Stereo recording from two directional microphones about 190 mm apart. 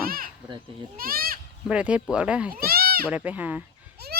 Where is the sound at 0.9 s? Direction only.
50° right (ahead or behind).